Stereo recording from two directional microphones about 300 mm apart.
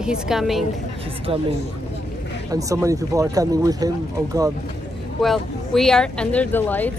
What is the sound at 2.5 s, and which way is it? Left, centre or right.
Speech, centre.